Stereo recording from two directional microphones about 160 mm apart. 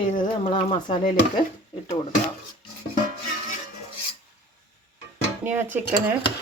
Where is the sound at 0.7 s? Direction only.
30° left (ahead or behind).